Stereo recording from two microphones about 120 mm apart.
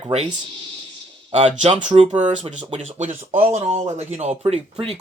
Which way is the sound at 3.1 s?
50° right (ahead or behind).